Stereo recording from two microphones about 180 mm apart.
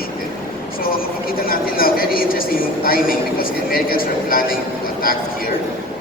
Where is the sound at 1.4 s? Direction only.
55° left (ahead or behind).